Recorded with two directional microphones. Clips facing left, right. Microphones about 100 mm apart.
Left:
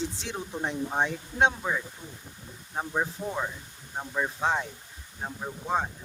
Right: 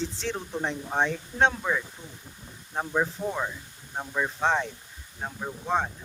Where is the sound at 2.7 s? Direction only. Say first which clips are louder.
Right 3 dB; 10° left (ahead or behind).